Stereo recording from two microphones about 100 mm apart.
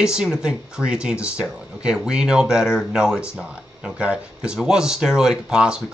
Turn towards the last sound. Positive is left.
turn(degrees=-5)  # may be behind; listen again after turning